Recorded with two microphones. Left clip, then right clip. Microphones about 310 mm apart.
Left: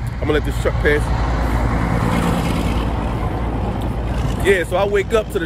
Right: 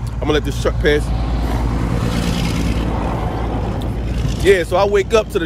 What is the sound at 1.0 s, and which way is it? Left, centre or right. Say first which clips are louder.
Vehicle: left 3 dB; left.